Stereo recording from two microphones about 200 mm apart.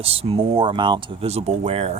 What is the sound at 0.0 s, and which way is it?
Speech, 30° right (ahead or behind).